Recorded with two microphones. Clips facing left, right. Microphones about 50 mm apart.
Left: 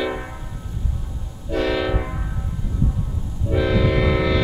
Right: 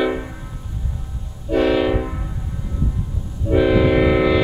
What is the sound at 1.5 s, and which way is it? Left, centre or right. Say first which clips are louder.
Train: right 5 dB; centre.